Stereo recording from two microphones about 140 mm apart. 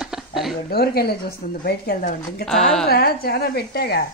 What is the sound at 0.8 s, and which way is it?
Speech, 90° left.